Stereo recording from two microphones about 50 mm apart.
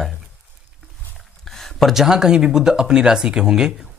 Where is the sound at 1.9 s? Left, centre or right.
Centre.